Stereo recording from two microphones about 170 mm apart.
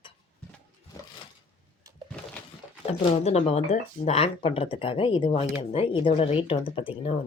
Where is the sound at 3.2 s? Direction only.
40° left (ahead or behind).